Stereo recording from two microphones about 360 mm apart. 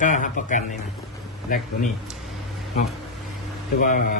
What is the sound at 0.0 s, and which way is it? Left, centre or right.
Speech, left.